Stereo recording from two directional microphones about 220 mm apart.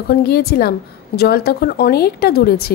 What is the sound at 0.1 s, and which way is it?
Speech, 45° left (ahead or behind).